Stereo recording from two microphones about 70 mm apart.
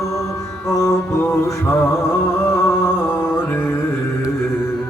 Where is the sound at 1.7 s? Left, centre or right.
Left.